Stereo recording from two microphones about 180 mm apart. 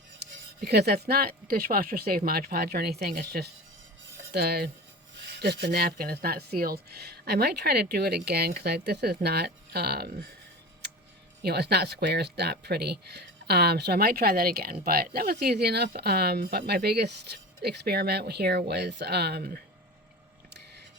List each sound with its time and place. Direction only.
0.2 s speech: 65° right (ahead or behind)
4.3 s cutlery: 60° right (ahead or behind)
5.2 s speech: 65° right (ahead or behind)
11.4 s speech: 65° right (ahead or behind)